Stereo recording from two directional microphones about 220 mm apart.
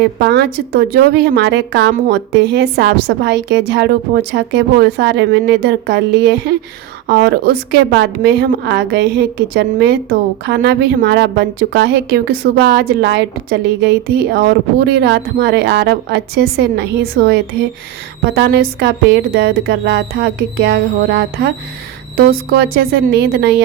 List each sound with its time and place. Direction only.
0.0 s a woman's voice: 50° right (ahead or behind)